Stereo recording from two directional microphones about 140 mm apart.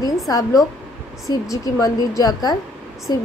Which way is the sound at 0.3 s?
25° left (ahead or behind).